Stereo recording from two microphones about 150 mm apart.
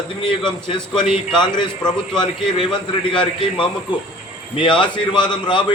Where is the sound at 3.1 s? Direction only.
35° left (ahead or behind).